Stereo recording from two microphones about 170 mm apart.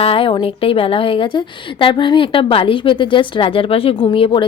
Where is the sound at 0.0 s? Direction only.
35° left (ahead or behind).